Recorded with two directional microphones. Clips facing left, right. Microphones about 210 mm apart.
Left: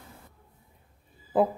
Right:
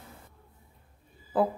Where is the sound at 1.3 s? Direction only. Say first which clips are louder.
Left 2 dB; 20° left (ahead or behind).